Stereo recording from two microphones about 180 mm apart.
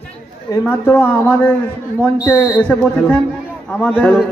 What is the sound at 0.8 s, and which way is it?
A man's voice, 10° left (ahead or behind).